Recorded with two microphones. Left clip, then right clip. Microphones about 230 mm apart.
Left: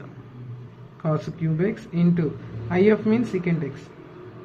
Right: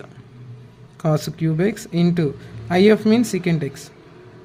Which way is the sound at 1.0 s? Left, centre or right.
Right.